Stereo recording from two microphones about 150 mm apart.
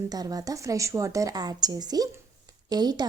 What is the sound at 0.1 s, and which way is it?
Speech, 25° right (ahead or behind).